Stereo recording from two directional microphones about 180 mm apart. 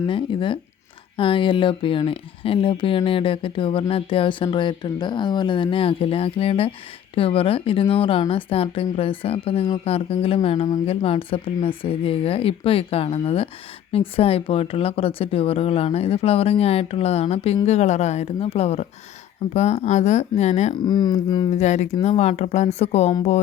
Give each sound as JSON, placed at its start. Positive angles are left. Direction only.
{"t": 0.1, "sound": "speech", "side_deg": 30}
{"t": 20.8, "sound": "speech", "side_deg": 25}
{"t": 21.5, "sound": "speech", "side_deg": 40}